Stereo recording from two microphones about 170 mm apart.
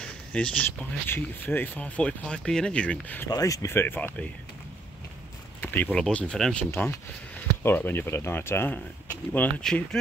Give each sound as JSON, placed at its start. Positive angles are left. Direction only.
{"t": 0.0, "sound": "speech", "side_deg": 5}
{"t": 3.3, "sound": "speech", "side_deg": 20}
{"t": 5.6, "sound": "speech", "side_deg": 10}
{"t": 7.6, "sound": "speech", "side_deg": 10}